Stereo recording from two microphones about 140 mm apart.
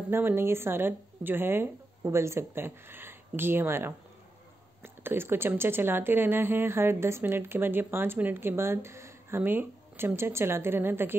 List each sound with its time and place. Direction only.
0.1 s speech: 15° right (ahead or behind)